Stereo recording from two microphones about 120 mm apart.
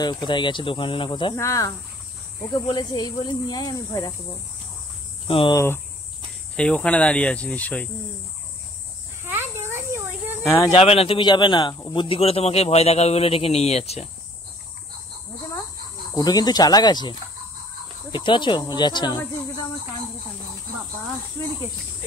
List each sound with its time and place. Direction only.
0.0 s speech: 40° left (ahead or behind)
1.3 s speech: 25° left (ahead or behind)
2.7 s speech: 35° left (ahead or behind)
5.3 s speech: 45° left (ahead or behind)
6.5 s speech: 10° left (ahead or behind)
9.2 s a sound: 20° right (ahead or behind)
10.4 s speech: 25° left (ahead or behind)
10.7 s speech: 50° left (ahead or behind)
11.1 s a man's voice: 40° left (ahead or behind); by 14.0 s 60° left (ahead or behind)
16.2 s speech: 30° left (ahead or behind)